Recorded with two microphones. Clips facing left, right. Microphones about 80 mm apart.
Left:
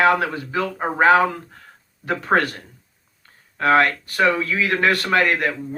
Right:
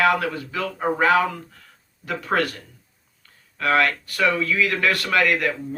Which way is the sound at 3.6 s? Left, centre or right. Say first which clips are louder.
Left 4 dB; left.